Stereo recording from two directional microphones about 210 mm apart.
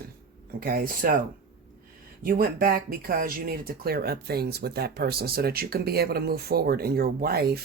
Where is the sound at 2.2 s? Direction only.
45° right (ahead or behind).